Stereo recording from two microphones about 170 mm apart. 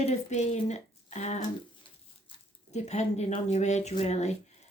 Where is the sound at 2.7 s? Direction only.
40° left (ahead or behind).